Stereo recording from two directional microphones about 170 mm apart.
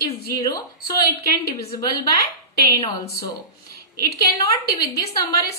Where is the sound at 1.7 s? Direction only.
20° left (ahead or behind).